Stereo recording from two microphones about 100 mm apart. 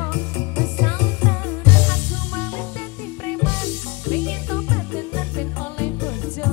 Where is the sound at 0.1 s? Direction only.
25° left (ahead or behind).